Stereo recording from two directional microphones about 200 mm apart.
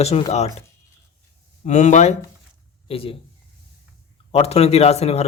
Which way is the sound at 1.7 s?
35° left (ahead or behind).